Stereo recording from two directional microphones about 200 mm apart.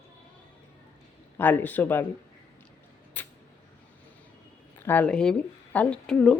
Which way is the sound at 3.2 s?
10° left (ahead or behind).